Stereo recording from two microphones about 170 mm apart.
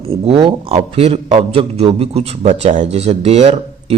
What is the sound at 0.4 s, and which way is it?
A man's voice, 35° right (ahead or behind).